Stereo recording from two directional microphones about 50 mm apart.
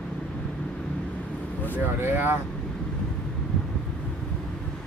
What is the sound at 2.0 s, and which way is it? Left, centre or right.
Speech, right.